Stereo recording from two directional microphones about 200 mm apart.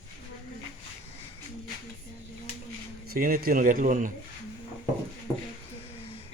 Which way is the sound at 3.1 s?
45° right (ahead or behind).